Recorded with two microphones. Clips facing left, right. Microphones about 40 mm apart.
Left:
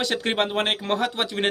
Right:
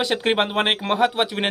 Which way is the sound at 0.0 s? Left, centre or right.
Centre.